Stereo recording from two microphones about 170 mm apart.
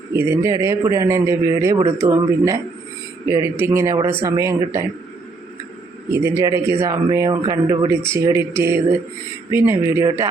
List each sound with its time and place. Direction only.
0.1 s a man's voice: 15° right (ahead or behind)
6.1 s a man's voice: 15° right (ahead or behind)